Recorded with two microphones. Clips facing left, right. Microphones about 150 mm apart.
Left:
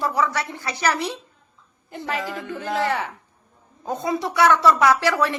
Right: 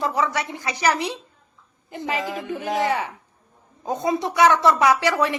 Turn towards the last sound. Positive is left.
turn(degrees=-15)  # may be behind; listen again after turning